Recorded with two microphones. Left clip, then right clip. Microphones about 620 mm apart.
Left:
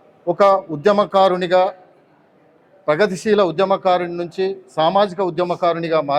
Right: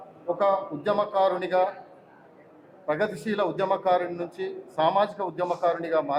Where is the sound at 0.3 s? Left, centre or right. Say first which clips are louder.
Left 10 dB; left.